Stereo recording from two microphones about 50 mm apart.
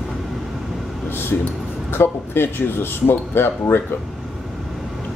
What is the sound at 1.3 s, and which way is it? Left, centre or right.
Speech, left.